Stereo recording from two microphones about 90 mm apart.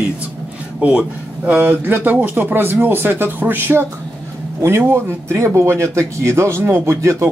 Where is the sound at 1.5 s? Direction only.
20° right (ahead or behind).